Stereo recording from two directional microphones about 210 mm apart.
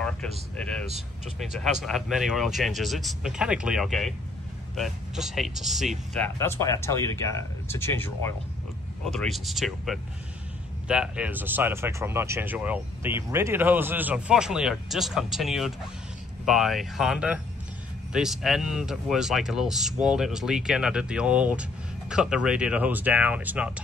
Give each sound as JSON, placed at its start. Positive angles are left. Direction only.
{"t": 0.6, "sound": "speech", "side_deg": 5}
{"t": 0.8, "sound": "speech", "side_deg": -30}
{"t": 1.4, "sound": "speech", "side_deg": 0}
{"t": 9.0, "sound": "speech", "side_deg": 0}